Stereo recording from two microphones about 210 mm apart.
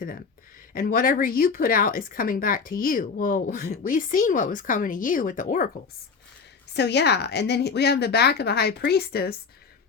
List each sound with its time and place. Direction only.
0.7 s speech: 40° left (ahead or behind)
6.7 s a woman's voice: 55° left (ahead or behind)